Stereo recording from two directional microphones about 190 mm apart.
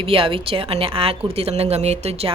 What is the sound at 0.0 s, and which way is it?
A woman's voice, 30° right (ahead or behind).